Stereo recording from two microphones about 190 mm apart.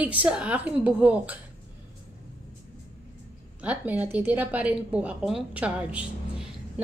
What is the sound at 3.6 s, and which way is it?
A woman's voice, 5° right (ahead or behind).